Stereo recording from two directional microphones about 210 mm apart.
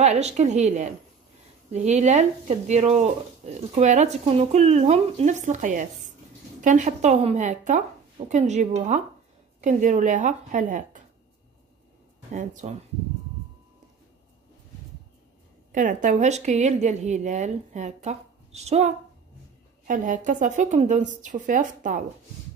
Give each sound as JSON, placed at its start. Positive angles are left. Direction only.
{"t": 0.0, "sound": "speech", "side_deg": -30}
{"t": 12.3, "sound": "speech", "side_deg": -35}
{"t": 15.7, "sound": "speech", "side_deg": -40}